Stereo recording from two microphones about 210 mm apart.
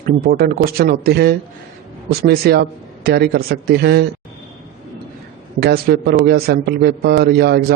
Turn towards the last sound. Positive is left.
turn(degrees=-50)  # may be behind; listen again after turning